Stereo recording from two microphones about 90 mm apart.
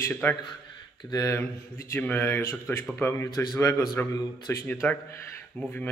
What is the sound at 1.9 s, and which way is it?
A man's voice, 20° left (ahead or behind).